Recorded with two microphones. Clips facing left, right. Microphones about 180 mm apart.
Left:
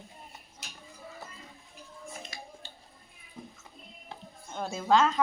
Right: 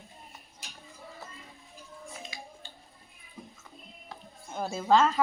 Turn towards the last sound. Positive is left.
turn(degrees=0)  # may be behind; listen again after turning